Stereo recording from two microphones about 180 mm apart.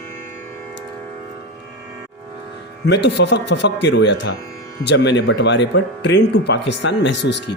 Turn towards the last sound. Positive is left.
turn(degrees=75)  # may be behind; listen again after turning